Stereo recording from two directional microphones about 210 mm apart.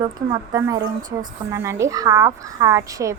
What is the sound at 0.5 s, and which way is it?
A woman's voice, 15° right (ahead or behind).